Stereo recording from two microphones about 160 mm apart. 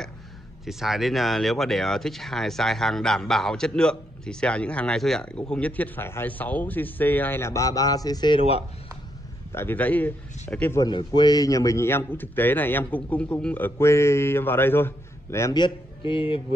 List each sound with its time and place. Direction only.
0.7 s a man's voice: centre (ahead or behind); by 8.4 s 25° left (ahead or behind)
9.5 s a man's voice: 15° left (ahead or behind)
10.9 s a man's voice: 30° left (ahead or behind)